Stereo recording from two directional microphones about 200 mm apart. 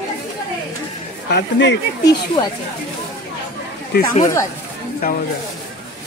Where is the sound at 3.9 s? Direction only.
55° left (ahead or behind).